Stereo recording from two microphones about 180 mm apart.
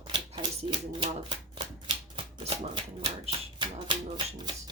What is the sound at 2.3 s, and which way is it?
Shuffling cards, 35° right (ahead or behind).